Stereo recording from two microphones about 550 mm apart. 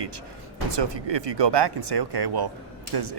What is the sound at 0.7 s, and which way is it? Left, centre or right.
Speech, right.